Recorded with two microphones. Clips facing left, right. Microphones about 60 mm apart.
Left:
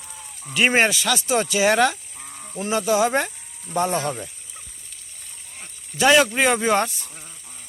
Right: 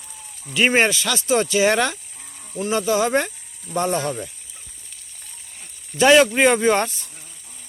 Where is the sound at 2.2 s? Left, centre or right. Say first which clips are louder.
Right 2 dB; left.